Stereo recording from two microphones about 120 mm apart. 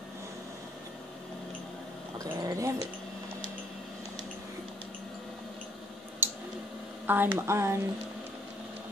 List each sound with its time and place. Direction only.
2.1 s speech: 25° right (ahead or behind)
6.2 s tick-tock: 20° right (ahead or behind)
7.1 s speech: 20° right (ahead or behind)